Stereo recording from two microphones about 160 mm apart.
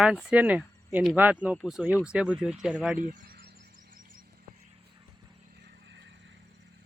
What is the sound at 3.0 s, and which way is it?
Speech, 65° right (ahead or behind).